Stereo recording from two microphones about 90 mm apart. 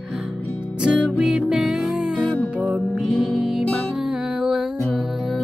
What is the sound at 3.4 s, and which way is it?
Music, 5° right (ahead or behind).